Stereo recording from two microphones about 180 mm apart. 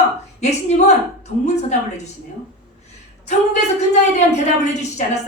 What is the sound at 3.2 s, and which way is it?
A woman's voice, 40° left (ahead or behind).